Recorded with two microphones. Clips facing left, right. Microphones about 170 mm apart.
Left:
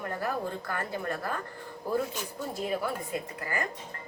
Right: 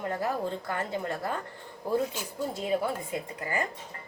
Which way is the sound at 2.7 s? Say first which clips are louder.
Right 3 dB; 25° right (ahead or behind).